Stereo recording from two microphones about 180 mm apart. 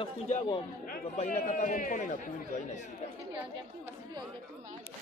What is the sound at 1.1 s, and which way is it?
A man's voice, 45° left (ahead or behind).